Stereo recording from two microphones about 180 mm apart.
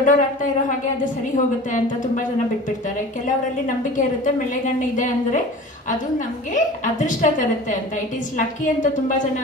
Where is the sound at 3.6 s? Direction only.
45° left (ahead or behind).